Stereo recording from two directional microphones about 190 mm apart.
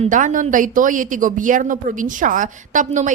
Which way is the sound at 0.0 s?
40° right (ahead or behind).